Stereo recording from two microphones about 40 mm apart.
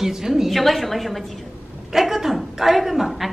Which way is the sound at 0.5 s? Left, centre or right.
Centre.